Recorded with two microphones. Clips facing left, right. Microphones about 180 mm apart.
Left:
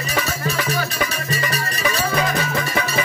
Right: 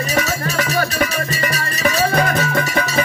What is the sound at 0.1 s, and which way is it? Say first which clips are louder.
Music: right 1 dB; 55° right (ahead or behind).